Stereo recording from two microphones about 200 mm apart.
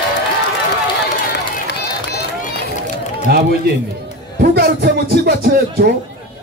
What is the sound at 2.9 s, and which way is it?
Run, 50° right (ahead or behind).